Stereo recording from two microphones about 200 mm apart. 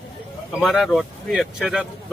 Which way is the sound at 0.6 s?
Centre (ahead or behind).